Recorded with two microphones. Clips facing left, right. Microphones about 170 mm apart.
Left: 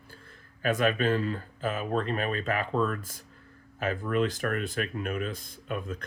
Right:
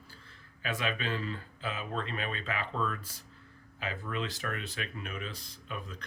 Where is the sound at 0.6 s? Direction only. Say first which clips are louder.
Left 9 dB; 50° left (ahead or behind).